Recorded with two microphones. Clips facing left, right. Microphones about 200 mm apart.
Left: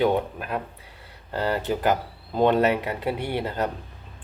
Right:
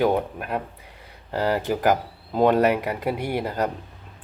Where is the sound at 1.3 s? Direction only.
10° right (ahead or behind).